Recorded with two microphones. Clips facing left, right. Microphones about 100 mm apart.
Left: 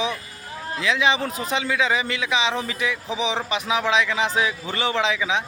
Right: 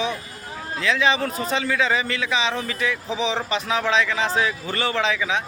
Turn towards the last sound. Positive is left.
turn(degrees=20)  # may be behind; listen again after turning